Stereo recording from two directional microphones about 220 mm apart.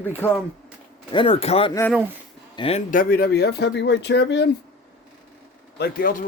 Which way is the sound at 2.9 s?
40° left (ahead or behind).